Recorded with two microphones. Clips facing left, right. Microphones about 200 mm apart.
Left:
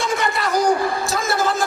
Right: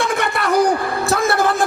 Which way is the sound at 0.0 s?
60° right (ahead or behind).